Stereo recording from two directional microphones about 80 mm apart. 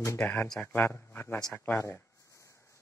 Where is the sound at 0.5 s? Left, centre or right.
Left.